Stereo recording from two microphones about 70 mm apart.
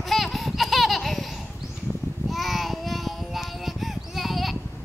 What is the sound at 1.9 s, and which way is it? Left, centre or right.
Child singing, centre.